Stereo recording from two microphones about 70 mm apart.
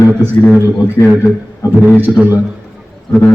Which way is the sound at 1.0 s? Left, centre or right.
Right.